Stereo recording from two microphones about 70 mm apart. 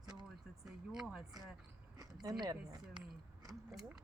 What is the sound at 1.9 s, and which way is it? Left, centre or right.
Speech, right.